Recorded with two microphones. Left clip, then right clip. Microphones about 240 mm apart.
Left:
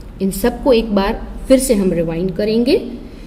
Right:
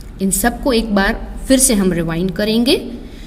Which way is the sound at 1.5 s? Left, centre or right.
Right.